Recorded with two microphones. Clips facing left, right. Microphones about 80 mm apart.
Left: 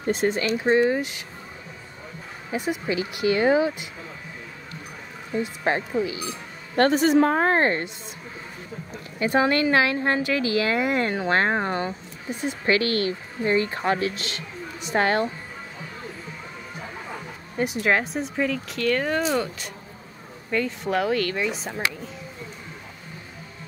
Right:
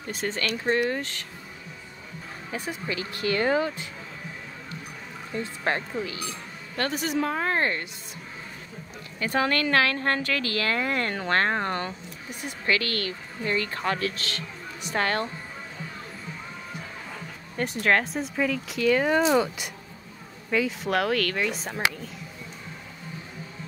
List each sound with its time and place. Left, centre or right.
0.1 s speech: centre
2.5 s speech: centre
5.3 s speech: centre
6.7 s a woman's voice: left
9.2 s speech: left
12.3 s speech: left
17.6 s speech: centre